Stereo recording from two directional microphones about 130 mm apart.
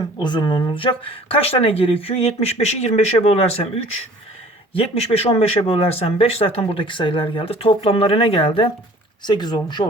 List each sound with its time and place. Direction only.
0.2 s speech: 35° left (ahead or behind); by 3.7 s 50° left (ahead or behind)
4.7 s speech: 50° left (ahead or behind)